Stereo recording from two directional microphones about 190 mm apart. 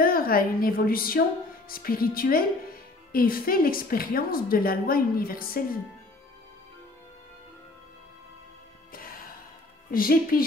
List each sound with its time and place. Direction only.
0.0 s a woman's voice: 50° left (ahead or behind)
8.9 s music: 50° left (ahead or behind)
9.8 s a woman's voice: 50° left (ahead or behind)